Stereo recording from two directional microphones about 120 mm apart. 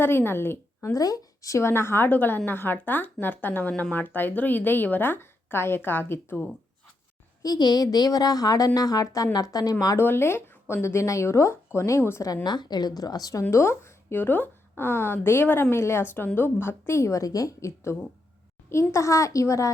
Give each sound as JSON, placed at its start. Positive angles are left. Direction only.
{"t": 0.0, "sound": "a woman's voice", "side_deg": 20}
{"t": 7.4, "sound": "a woman's voice", "side_deg": 35}